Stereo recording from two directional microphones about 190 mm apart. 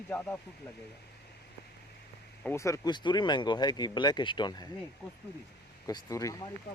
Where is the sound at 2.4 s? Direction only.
15° left (ahead or behind).